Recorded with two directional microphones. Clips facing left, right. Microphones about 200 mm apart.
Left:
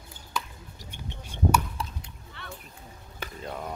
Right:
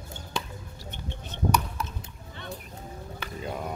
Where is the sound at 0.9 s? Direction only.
10° left (ahead or behind).